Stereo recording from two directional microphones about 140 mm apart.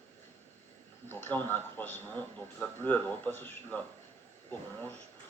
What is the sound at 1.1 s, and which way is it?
A man's voice, 15° left (ahead or behind).